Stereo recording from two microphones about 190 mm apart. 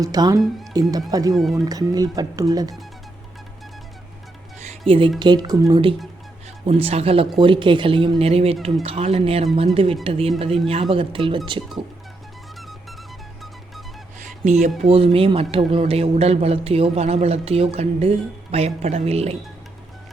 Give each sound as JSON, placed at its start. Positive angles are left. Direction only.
{"t": 0.0, "sound": "speech", "side_deg": -20}
{"t": 1.4, "sound": "speech", "side_deg": 0}
{"t": 1.6, "sound": "speech", "side_deg": -20}
{"t": 4.9, "sound": "speech", "side_deg": -30}
{"t": 6.7, "sound": "a man's voice", "side_deg": -30}
{"t": 14.4, "sound": "a man's voice", "side_deg": -35}